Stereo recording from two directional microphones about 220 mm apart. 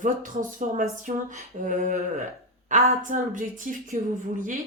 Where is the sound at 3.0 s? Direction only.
35° right (ahead or behind).